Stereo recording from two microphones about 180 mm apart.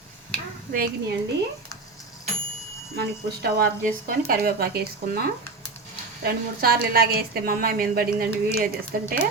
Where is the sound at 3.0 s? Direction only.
60° right (ahead or behind).